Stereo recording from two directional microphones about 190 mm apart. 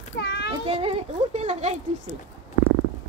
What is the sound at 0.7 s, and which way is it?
Speech, 30° right (ahead or behind).